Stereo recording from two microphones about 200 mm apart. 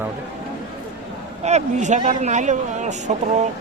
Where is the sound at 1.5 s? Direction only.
35° right (ahead or behind).